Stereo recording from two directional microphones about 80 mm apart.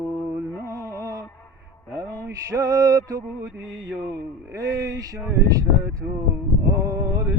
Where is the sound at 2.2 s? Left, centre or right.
Right.